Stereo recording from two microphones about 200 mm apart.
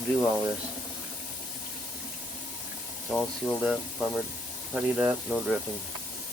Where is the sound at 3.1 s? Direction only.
5° left (ahead or behind).